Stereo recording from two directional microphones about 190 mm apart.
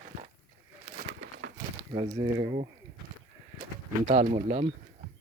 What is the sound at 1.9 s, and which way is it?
Speech, 25° right (ahead or behind).